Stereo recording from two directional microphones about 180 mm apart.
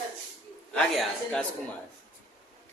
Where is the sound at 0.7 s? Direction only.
5° left (ahead or behind).